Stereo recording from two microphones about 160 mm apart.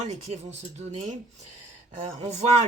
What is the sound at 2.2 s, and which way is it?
Speech, 45° right (ahead or behind).